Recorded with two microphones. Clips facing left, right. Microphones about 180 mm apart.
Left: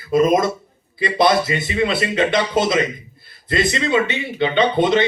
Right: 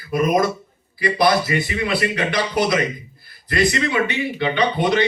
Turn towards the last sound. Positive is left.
turn(degrees=25)  # may be behind; listen again after turning